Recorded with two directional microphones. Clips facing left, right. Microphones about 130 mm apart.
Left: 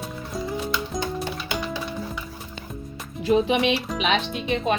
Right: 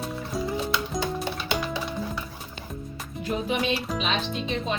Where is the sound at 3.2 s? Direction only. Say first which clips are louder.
Left 7 dB; 90° left.